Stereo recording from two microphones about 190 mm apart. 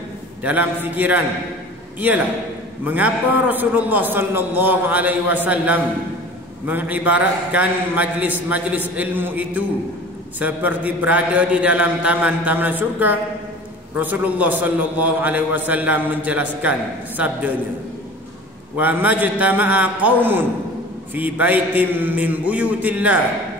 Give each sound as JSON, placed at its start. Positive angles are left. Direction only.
{"t": 0.4, "sound": "a man's voice", "side_deg": -10}
{"t": 2.8, "sound": "a man's voice", "side_deg": -10}
{"t": 18.8, "sound": "a man's voice", "side_deg": -10}